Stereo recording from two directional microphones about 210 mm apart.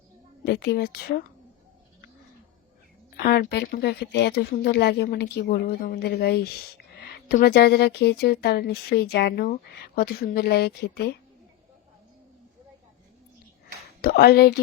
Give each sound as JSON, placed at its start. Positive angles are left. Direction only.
{"t": 0.4, "sound": "a woman's voice", "side_deg": 50}
{"t": 3.2, "sound": "a woman's voice", "side_deg": 50}
{"t": 14.0, "sound": "a woman's voice", "side_deg": 50}